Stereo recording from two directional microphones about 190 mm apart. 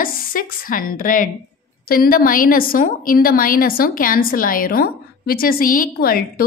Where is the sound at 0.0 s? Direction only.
50° left (ahead or behind).